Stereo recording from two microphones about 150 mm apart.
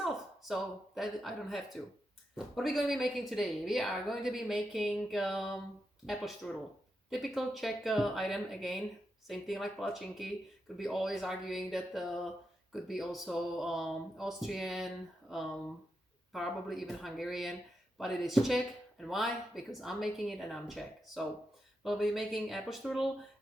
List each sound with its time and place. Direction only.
0.0 s speech: centre (ahead or behind)